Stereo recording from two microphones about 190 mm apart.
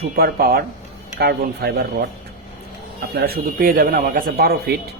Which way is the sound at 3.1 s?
50° right (ahead or behind).